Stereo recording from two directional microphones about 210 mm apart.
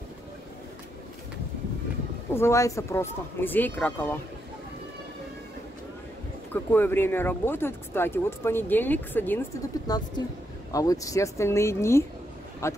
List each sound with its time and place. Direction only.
2.3 s speech: 15° left (ahead or behind)
6.5 s speech: 10° left (ahead or behind)
9.8 s speech: 20° left (ahead or behind)